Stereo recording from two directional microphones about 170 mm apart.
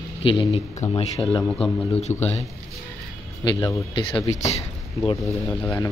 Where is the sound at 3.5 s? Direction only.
25° left (ahead or behind).